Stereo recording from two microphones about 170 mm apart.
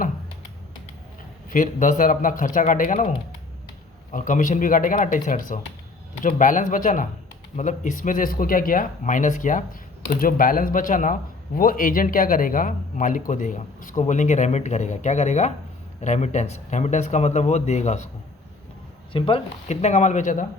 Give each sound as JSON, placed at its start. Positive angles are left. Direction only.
{"t": 1.5, "sound": "speech", "side_deg": 50}
{"t": 4.1, "sound": "speech", "side_deg": 50}
{"t": 19.1, "sound": "speech", "side_deg": 30}